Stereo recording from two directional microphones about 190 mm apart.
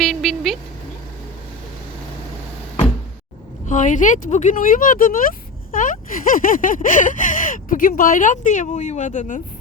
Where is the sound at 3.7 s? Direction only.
40° left (ahead or behind).